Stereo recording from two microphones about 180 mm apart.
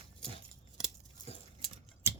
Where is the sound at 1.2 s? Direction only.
20° left (ahead or behind).